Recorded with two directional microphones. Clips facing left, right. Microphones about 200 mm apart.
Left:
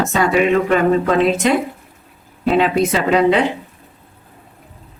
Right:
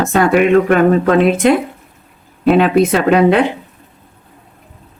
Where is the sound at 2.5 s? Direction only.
55° right (ahead or behind).